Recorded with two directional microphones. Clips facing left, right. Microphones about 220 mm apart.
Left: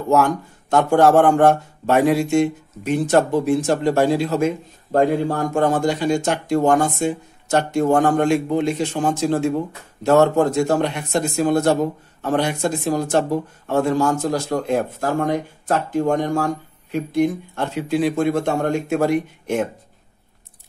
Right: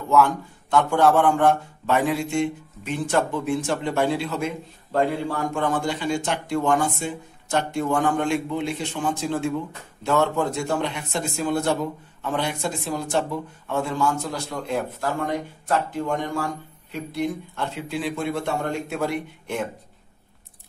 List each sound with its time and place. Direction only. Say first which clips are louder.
0.1 s a man's voice: left 2 dB; 45° left (ahead or behind)